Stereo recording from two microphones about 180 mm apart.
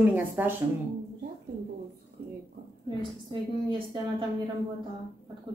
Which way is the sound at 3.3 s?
25° right (ahead or behind).